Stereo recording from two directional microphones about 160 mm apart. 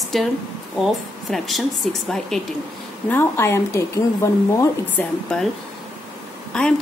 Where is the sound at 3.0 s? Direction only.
15° left (ahead or behind).